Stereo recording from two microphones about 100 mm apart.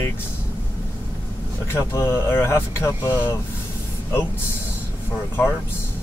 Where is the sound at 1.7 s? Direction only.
25° left (ahead or behind).